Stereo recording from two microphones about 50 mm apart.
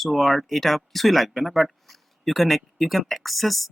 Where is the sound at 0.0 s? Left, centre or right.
Centre.